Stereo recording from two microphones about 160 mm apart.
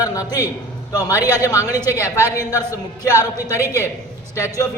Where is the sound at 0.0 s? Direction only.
20° left (ahead or behind).